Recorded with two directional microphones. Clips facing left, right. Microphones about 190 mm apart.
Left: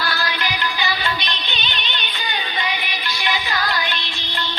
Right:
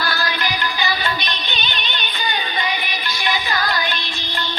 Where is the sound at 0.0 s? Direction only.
45° right (ahead or behind).